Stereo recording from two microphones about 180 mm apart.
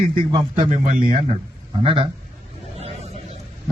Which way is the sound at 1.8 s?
30° right (ahead or behind).